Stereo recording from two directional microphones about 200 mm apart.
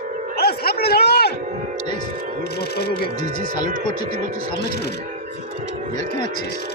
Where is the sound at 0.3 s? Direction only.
50° left (ahead or behind).